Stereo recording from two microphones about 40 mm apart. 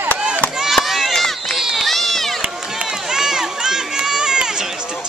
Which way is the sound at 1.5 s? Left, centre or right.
Centre.